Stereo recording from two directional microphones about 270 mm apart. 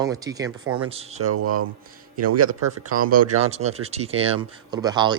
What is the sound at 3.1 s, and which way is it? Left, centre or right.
Speech, right.